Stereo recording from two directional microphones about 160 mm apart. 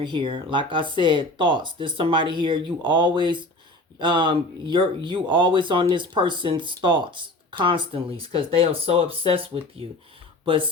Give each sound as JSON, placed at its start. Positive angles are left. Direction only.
{"t": 0.0, "sound": "speech", "side_deg": -30}